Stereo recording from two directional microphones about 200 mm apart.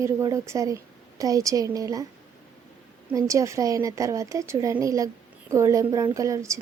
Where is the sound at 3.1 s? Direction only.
15° right (ahead or behind).